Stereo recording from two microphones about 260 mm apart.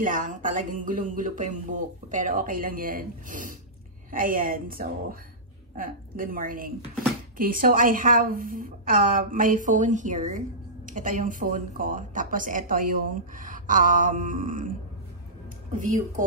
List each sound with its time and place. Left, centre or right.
0.0 s speech: right
15.7 s speech: right